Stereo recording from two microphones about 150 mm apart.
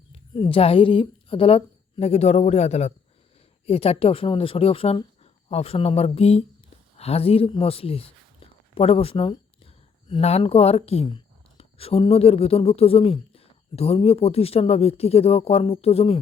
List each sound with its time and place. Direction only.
0.1 s speech: 40° left (ahead or behind)